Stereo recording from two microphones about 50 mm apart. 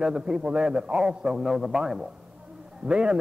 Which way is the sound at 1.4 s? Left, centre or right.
Centre.